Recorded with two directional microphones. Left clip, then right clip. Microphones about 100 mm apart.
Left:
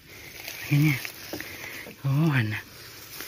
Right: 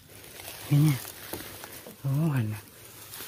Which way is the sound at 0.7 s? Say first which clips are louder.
Left 2 dB; 45° right (ahead or behind).